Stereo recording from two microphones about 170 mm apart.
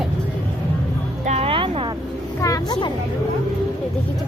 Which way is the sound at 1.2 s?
40° right (ahead or behind).